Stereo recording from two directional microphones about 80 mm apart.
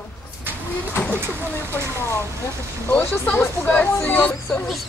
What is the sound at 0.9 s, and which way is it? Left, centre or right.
Speech, left.